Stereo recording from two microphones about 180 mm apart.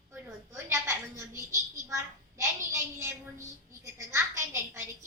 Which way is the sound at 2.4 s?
15° right (ahead or behind).